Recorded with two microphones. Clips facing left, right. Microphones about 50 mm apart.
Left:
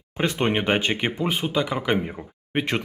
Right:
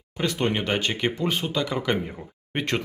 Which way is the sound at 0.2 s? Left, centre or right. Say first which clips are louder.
Left 2 dB; left.